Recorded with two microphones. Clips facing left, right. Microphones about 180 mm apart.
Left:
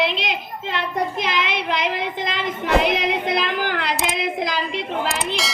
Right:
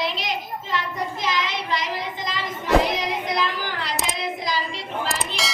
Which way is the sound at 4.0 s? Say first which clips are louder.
Left 4 dB; 60° left (ahead or behind).